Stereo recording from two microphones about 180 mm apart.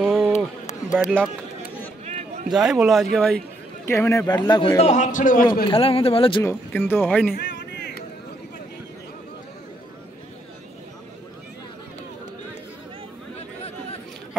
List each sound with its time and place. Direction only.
0.0 s a sound: centre (ahead or behind)
2.0 s run: 35° right (ahead or behind)
2.5 s a man's voice: centre (ahead or behind); by 5.5 s 50° left (ahead or behind)
5.7 s speech: 30° left (ahead or behind)
6.4 s speech: 10° left (ahead or behind)
7.3 s a sound: 70° left (ahead or behind)